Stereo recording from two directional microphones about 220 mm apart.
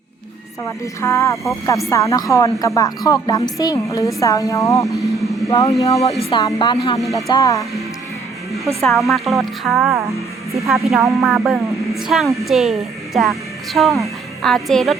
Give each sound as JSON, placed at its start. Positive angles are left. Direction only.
{"t": 0.6, "sound": "speech", "side_deg": 15}
{"t": 5.5, "sound": "music", "side_deg": 20}
{"t": 7.0, "sound": "a woman's voice", "side_deg": 0}
{"t": 7.3, "sound": "speech", "side_deg": 15}
{"t": 8.8, "sound": "a woman's voice", "side_deg": 0}